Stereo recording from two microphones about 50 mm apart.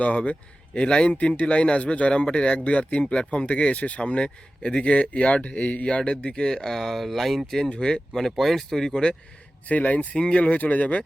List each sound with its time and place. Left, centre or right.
0.0 s speech: left; by 7.6 s centre
7.6 s speech: centre
8.9 s speech: left
10.2 s speech: left